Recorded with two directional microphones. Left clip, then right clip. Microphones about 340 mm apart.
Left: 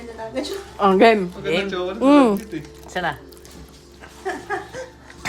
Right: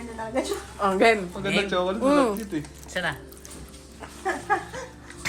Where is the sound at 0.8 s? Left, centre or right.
Left.